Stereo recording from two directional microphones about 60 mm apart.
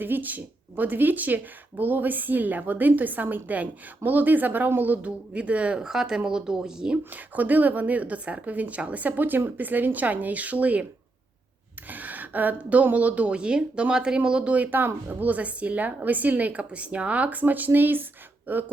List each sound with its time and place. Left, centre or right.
0.0 s a woman's voice: right
5.8 s a woman's voice: centre
7.1 s a woman's voice: right
11.9 s a woman's voice: right